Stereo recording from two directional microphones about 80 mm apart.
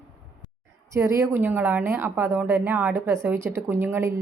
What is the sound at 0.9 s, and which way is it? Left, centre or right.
Speech, right.